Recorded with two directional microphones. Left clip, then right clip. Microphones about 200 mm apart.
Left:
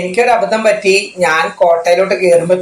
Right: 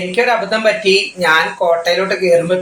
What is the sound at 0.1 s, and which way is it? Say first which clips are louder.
Speech: left 3 dB; 15° left (ahead or behind).